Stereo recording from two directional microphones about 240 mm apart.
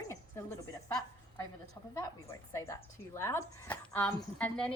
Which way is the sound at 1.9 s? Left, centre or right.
Centre.